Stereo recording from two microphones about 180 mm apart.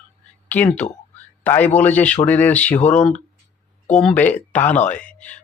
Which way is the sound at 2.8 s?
40° left (ahead or behind).